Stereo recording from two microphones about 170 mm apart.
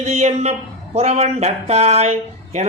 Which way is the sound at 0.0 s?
40° right (ahead or behind).